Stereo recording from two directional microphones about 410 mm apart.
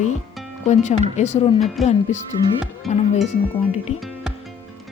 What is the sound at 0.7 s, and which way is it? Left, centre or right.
A woman's voice, centre.